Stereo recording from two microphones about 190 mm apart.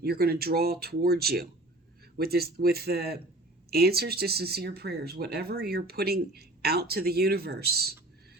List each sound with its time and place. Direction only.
0.0 s speech: 55° right (ahead or behind)